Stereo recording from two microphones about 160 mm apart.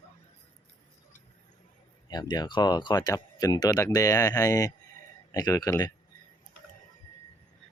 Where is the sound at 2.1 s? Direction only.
25° left (ahead or behind).